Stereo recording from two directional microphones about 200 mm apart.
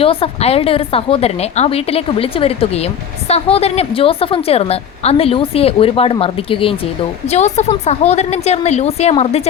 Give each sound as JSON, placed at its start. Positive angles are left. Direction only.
{"t": 0.0, "sound": "a woman's voice", "side_deg": 30}